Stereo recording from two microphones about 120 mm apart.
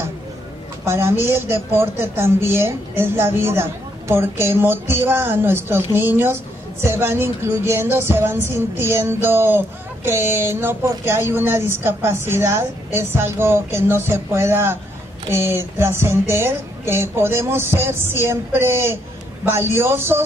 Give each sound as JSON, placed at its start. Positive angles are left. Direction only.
{"t": 0.8, "sound": "speech", "side_deg": -20}